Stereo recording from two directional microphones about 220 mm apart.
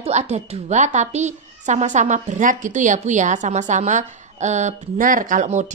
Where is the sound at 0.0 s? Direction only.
30° right (ahead or behind).